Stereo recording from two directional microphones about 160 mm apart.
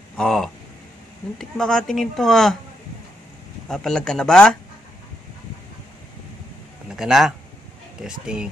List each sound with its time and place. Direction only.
0.2 s speech: centre (ahead or behind)
3.6 s speech: centre (ahead or behind)
7.0 s speech: centre (ahead or behind)